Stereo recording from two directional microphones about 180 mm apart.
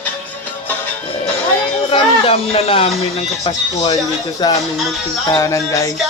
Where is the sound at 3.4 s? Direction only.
30° left (ahead or behind).